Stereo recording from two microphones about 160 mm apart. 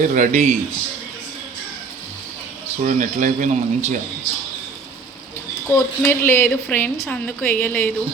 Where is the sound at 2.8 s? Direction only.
50° right (ahead or behind).